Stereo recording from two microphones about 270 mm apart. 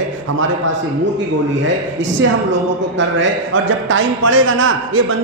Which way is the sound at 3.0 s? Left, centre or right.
Right.